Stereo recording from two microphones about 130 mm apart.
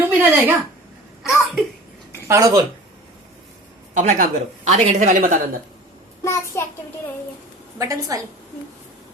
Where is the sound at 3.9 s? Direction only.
75° right (ahead or behind).